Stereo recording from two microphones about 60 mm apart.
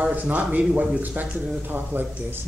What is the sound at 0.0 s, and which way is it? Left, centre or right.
A man's voice, right.